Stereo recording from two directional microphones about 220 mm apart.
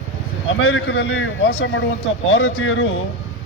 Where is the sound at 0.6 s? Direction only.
60° left (ahead or behind).